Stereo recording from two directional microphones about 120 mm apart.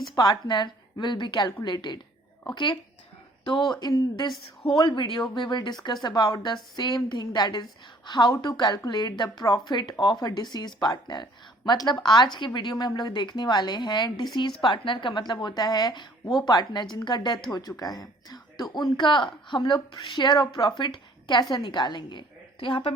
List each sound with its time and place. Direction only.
0.2 s a woman's voice: 35° left (ahead or behind)
3.4 s a woman's voice: 40° left (ahead or behind)